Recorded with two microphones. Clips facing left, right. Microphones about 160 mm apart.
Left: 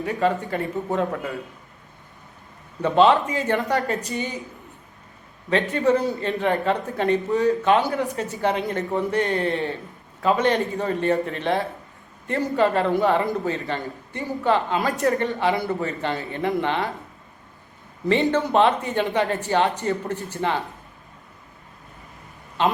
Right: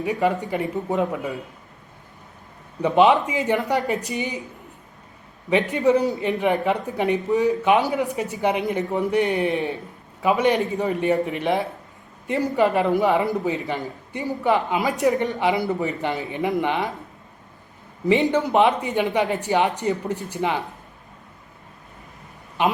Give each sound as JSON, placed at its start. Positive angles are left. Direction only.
{"t": 0.0, "sound": "a woman's voice", "side_deg": -15}
{"t": 2.8, "sound": "a woman's voice", "side_deg": -15}
{"t": 5.7, "sound": "a woman's voice", "side_deg": -15}
{"t": 18.1, "sound": "a woman's voice", "side_deg": -15}
{"t": 22.6, "sound": "a woman's voice", "side_deg": -10}